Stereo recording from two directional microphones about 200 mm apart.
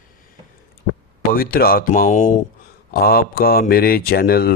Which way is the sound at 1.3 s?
45° left (ahead or behind).